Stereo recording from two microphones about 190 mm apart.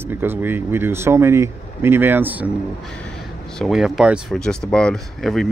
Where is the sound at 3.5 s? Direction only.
Centre (ahead or behind).